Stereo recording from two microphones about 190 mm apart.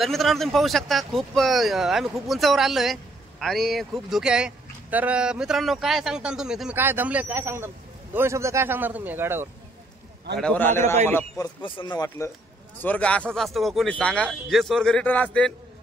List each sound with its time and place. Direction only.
0.0 s speech: centre (ahead or behind)
10.4 s a man's voice: 10° left (ahead or behind)
11.6 s speech: 25° left (ahead or behind)
12.8 s speech: 5° left (ahead or behind)